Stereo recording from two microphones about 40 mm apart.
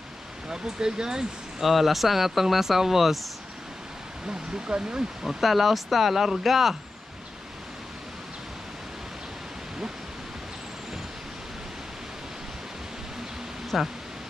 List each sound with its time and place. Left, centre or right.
0.5 s speech: centre
1.6 s speech: centre
4.3 s speech: right
5.2 s speech: centre
13.7 s speech: centre